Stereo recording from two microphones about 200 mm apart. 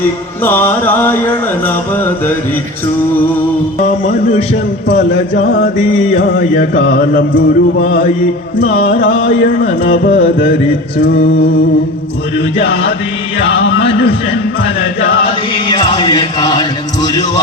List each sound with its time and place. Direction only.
0.4 s music: 10° left (ahead or behind)
3.8 s music: 35° left (ahead or behind)
4.9 s music: 45° left (ahead or behind)
6.9 s music: 45° left (ahead or behind)
7.3 s a sound: 70° left (ahead or behind)
9.6 s music: 65° left (ahead or behind)
13.4 s music: 60° left (ahead or behind)
15.7 s chant: 20° left (ahead or behind)